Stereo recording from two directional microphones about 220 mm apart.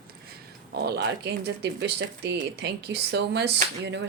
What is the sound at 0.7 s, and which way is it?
Speech, 50° right (ahead or behind).